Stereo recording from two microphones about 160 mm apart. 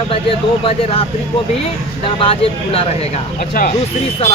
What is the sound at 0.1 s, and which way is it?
Speech, 35° left (ahead or behind).